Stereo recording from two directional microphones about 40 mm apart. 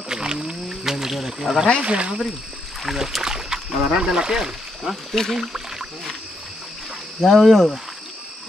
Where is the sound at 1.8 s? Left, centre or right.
Right.